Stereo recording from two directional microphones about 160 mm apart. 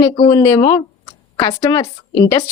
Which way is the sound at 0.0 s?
25° left (ahead or behind).